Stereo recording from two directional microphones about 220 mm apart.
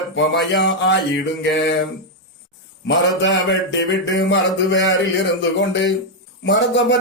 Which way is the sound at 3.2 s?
55° left (ahead or behind).